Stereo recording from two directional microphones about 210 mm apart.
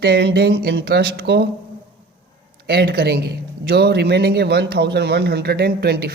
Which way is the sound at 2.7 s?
50° right (ahead or behind).